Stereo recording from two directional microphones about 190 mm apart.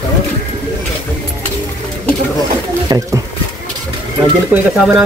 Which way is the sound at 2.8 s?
20° right (ahead or behind).